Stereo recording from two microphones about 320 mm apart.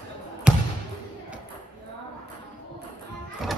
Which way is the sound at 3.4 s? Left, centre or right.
Centre.